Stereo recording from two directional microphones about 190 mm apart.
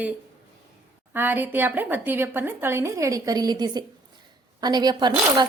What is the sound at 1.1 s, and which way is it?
Speech, 10° right (ahead or behind).